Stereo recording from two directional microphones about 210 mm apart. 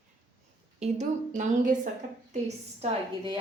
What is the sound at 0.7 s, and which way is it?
A woman's voice, 35° right (ahead or behind).